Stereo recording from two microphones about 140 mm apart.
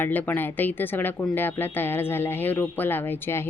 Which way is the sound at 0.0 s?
15° left (ahead or behind).